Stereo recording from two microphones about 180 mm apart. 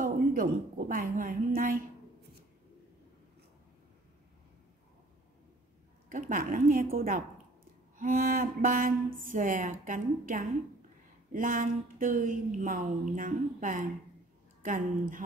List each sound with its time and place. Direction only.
0.0 s a woman's voice: 50° right (ahead or behind)
6.0 s speech: 45° right (ahead or behind)